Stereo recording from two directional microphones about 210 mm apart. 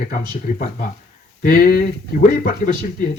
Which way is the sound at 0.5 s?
40° left (ahead or behind).